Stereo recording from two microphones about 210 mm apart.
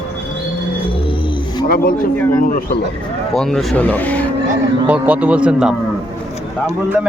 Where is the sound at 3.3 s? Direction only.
Centre (ahead or behind).